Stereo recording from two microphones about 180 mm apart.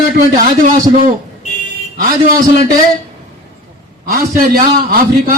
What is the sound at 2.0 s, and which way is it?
Speech, 50° right (ahead or behind).